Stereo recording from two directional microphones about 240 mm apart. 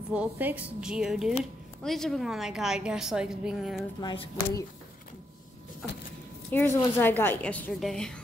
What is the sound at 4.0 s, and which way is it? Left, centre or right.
Speech, centre.